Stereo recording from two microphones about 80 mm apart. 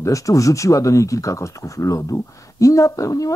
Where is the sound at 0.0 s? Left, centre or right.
Left.